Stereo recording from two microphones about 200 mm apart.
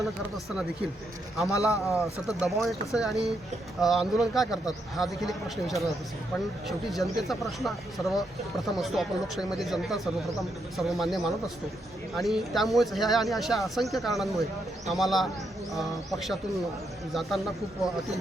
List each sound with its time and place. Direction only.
1.5 s speech: 15° left (ahead or behind)
2.4 s a man's voice: centre (ahead or behind)